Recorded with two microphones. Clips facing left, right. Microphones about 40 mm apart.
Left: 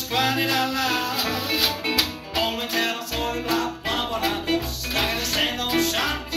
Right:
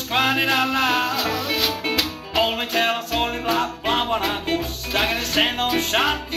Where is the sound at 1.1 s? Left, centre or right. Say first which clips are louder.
Right 2 dB; centre.